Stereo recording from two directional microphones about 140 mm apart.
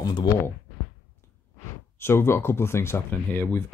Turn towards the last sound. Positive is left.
turn(degrees=15)  # may be behind; listen again after turning